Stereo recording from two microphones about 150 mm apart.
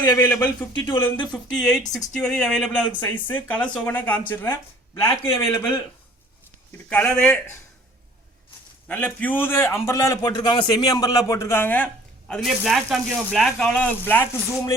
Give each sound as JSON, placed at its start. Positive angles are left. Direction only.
{"t": 0.2, "sound": "speech", "side_deg": 10}
{"t": 8.9, "sound": "a man's voice", "side_deg": 10}
{"t": 12.3, "sound": "speech", "side_deg": 0}